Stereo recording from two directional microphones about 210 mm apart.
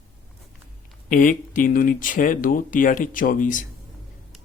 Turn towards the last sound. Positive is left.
turn(degrees=40)  # may be behind; listen again after turning